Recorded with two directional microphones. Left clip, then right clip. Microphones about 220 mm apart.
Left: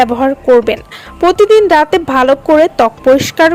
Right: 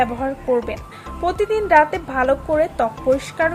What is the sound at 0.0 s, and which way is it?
Speech, 40° left (ahead or behind).